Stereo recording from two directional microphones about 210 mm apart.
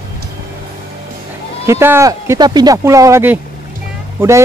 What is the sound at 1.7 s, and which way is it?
Speech, 10° right (ahead or behind).